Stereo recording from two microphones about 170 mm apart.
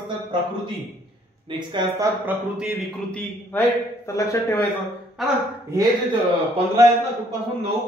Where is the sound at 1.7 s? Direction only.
25° right (ahead or behind).